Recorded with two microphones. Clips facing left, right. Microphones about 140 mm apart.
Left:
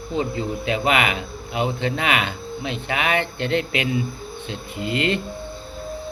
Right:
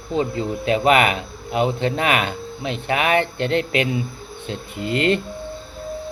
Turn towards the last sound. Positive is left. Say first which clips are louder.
# right 3 dB
turn(degrees=-40)  # may be behind; listen again after turning